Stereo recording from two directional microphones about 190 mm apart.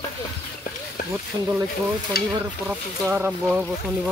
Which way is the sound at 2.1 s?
55° left (ahead or behind).